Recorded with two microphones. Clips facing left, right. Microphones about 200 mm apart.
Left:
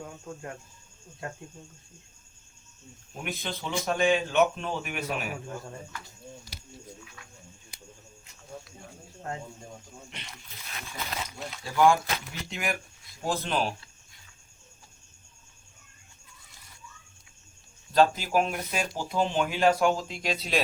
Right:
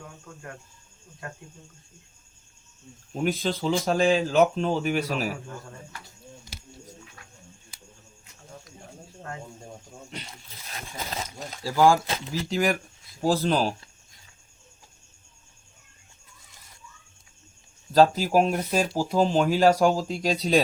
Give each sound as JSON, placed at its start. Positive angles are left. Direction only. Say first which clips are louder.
{"t": 3.2, "sound": "speech", "louder": "right 9 dB", "side_deg": -30}
{"t": 10.1, "sound": "speech", "louder": "right 5 dB", "side_deg": -35}
{"t": 17.9, "sound": "speech", "louder": "right 4 dB", "side_deg": -35}